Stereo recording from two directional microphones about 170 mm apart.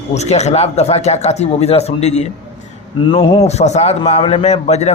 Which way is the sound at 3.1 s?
30° left (ahead or behind).